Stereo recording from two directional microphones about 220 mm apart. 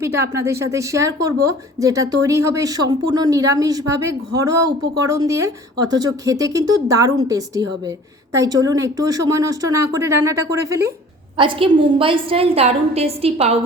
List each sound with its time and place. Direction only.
0.0 s a woman's voice: 10° right (ahead or behind)
11.3 s a woman's voice: 25° right (ahead or behind)